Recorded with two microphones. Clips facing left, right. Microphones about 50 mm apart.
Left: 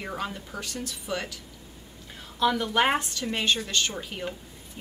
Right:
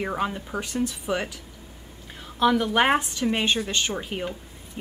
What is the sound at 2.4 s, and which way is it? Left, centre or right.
A woman's voice, centre.